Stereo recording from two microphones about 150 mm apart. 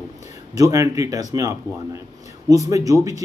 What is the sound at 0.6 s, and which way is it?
A man's voice, 20° right (ahead or behind).